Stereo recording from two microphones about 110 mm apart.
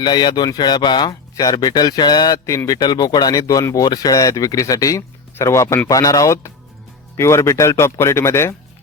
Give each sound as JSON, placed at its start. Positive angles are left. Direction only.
{"t": 0.0, "sound": "speech", "side_deg": 40}